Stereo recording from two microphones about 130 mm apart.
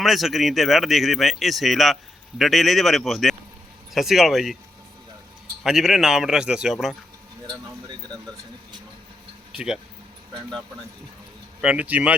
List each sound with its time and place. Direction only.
0.0 s speech: centre (ahead or behind)
5.6 s speech: centre (ahead or behind)
9.5 s speech: 5° right (ahead or behind)
11.6 s speech: 10° right (ahead or behind)